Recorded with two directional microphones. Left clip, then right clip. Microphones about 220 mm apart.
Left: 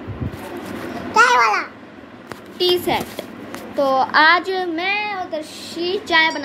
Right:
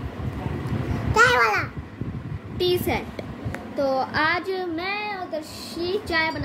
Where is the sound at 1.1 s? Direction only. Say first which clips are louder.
Left 4 dB; 20° right (ahead or behind).